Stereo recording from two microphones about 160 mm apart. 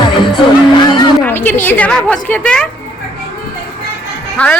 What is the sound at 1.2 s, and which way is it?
A woman's voice, 10° left (ahead or behind).